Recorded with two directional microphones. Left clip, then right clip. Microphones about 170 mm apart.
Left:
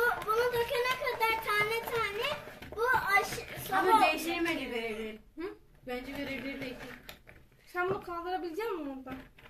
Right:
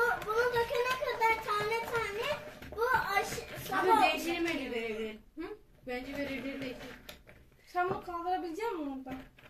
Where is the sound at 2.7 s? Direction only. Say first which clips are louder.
Left 2 dB; 10° left (ahead or behind).